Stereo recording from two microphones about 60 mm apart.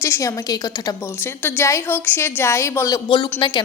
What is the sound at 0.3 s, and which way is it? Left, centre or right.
Speech, left.